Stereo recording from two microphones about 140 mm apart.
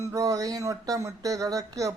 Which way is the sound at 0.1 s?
25° right (ahead or behind).